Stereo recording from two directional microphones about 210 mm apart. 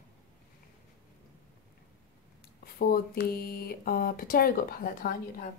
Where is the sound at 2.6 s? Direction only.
45° left (ahead or behind).